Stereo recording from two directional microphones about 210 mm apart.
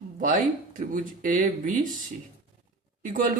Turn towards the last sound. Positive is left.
turn(degrees=-40)  # may be behind; listen again after turning